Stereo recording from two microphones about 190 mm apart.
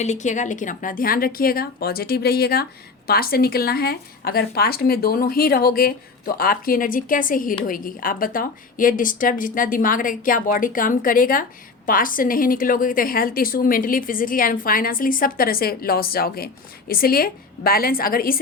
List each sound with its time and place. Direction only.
0.0 s a woman's voice: 40° left (ahead or behind)